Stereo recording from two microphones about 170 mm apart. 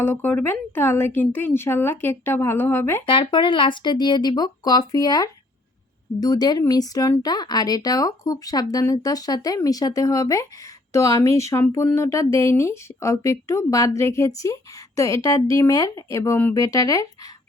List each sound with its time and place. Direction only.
0.0 s speech: 10° left (ahead or behind)
3.1 s speech: 30° left (ahead or behind)